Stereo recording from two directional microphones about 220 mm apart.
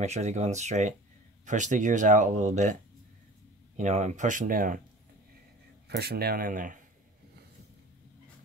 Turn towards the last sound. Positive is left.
turn(degrees=-35)  # may be behind; listen again after turning